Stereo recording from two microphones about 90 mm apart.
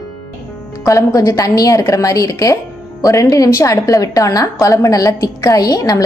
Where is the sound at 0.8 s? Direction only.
35° left (ahead or behind).